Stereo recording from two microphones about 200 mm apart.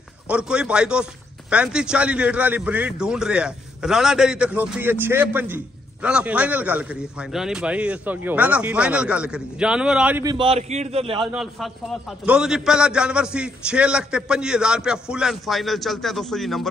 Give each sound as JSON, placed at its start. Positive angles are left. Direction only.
{"t": 0.3, "sound": "a man's voice", "side_deg": -5}
{"t": 10.2, "sound": "a man's voice", "side_deg": -25}
{"t": 11.3, "sound": "a man's voice", "side_deg": 0}